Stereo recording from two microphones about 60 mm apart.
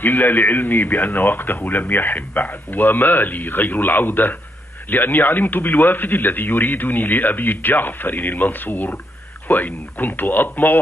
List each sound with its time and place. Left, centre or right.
0.0 s speech: left